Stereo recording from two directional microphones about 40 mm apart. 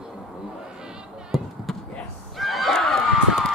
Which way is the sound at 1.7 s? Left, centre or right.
Centre.